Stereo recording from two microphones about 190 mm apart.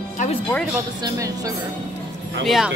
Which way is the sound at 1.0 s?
20° right (ahead or behind).